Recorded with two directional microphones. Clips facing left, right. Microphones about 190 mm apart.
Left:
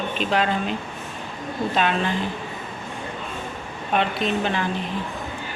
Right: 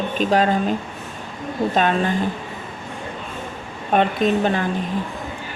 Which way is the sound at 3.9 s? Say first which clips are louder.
Right 5 dB; 45° right (ahead or behind).